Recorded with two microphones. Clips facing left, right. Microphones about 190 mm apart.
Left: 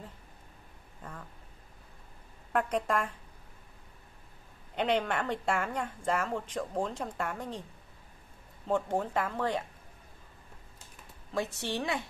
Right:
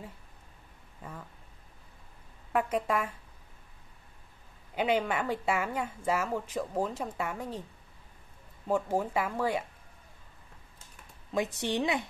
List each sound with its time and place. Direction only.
2.5 s speech: 5° right (ahead or behind)
4.7 s speech: 5° right (ahead or behind)
8.6 s speech: 5° right (ahead or behind)
11.3 s speech: 15° right (ahead or behind)